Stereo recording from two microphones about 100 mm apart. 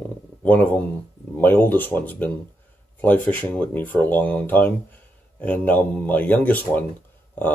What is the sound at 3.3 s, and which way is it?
Speech, 15° left (ahead or behind).